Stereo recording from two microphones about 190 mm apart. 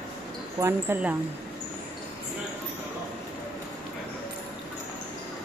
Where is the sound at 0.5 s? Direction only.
10° right (ahead or behind).